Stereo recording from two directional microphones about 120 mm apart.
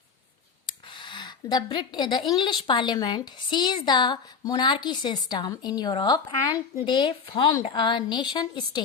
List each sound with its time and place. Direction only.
0.7 s a woman's voice: 40° left (ahead or behind)